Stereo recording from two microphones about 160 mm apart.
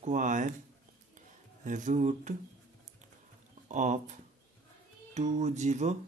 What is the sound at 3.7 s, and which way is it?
Speech, 50° right (ahead or behind).